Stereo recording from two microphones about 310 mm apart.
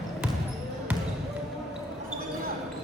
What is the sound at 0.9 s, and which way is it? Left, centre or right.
Basketball bounce, centre.